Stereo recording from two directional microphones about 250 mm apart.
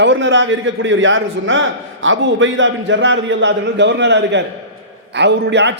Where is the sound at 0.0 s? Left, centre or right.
Right.